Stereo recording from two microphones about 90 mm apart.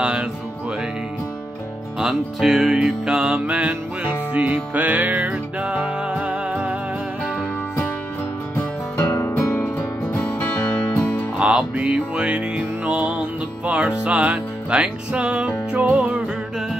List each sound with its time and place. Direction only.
0.0 s music: 10° right (ahead or behind)
2.0 s music: 5° right (ahead or behind)
9.0 s music: 30° left (ahead or behind)
11.3 s music: 10° right (ahead or behind)